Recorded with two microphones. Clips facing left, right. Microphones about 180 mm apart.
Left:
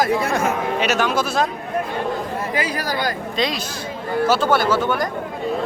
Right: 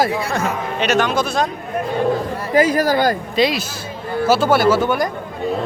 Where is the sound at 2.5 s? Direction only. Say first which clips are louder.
Right 13 dB; 45° right (ahead or behind).